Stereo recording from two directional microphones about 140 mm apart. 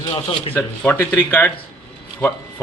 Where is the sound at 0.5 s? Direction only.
10° left (ahead or behind).